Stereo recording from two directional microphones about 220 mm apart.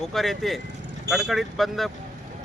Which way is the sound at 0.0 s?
Centre (ahead or behind).